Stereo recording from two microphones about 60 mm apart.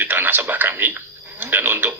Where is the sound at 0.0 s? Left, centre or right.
Right.